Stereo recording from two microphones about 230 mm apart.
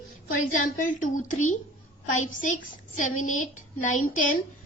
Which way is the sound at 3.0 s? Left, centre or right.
Left.